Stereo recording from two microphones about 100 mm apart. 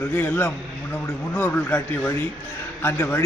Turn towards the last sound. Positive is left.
turn(degrees=20)  # may be behind; listen again after turning